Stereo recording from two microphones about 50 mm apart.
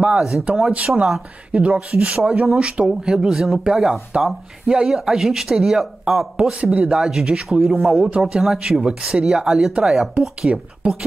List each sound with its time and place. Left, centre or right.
0.0 s speech: centre
0.7 s speech: right; by 6.2 s centre
6.3 s speech: right
6.9 s speech: centre
10.8 s speech: right